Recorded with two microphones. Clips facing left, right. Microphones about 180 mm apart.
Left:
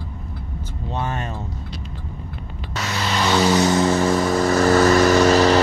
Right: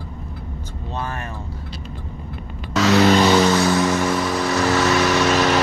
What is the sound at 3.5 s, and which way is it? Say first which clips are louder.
Vehicle: left 1 dB; 20° left (ahead or behind).